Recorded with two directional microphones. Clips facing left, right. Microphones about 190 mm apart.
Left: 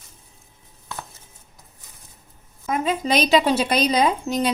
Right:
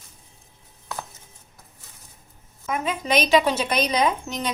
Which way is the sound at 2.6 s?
35° left (ahead or behind).